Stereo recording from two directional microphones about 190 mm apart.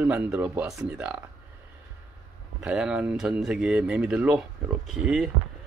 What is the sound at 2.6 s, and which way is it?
A man's voice, 5° right (ahead or behind).